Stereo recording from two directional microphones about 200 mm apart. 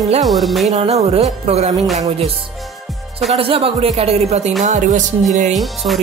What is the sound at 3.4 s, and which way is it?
Speech, 25° right (ahead or behind).